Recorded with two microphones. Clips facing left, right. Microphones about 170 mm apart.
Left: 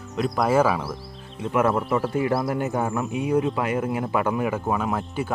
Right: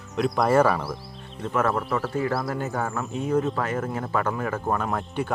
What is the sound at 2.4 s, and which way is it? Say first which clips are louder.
Speech: left 3 dB; 20° left (ahead or behind).